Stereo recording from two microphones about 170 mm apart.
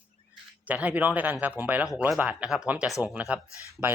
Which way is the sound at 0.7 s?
10° right (ahead or behind).